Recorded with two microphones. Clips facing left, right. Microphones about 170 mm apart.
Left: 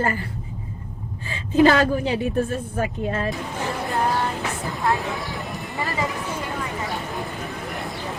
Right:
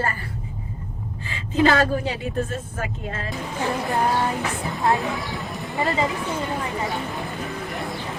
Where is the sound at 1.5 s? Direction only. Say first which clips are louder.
Left 3 dB; 15° left (ahead or behind).